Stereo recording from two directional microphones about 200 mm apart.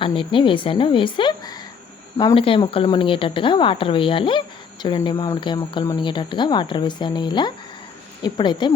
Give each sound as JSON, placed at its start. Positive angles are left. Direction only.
{"t": 0.0, "sound": "speech", "side_deg": 25}